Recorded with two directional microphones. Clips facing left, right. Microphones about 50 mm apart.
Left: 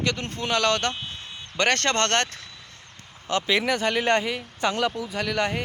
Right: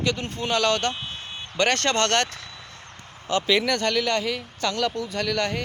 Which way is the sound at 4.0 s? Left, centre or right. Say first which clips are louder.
Left 2 dB; left.